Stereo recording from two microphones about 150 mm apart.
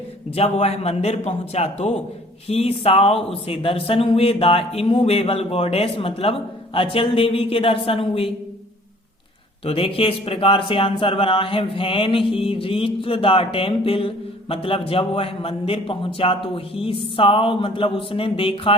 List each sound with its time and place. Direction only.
0.3 s a man's voice: 45° left (ahead or behind)
9.6 s speech: 40° left (ahead or behind)